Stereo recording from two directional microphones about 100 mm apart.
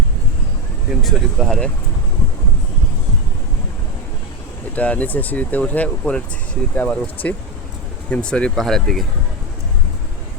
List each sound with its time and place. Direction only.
1.0 s speech: centre (ahead or behind)
4.7 s speech: 15° left (ahead or behind)